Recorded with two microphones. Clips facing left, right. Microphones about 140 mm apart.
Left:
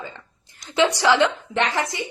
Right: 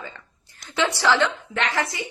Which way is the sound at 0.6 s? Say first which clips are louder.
Left 4 dB; 15° left (ahead or behind).